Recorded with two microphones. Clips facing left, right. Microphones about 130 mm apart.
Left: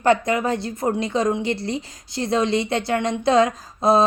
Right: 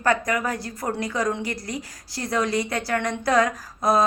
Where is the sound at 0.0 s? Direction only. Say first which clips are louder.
Left 4 dB; 25° left (ahead or behind).